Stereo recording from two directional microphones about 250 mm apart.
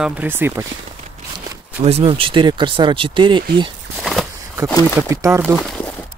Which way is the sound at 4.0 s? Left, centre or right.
Centre.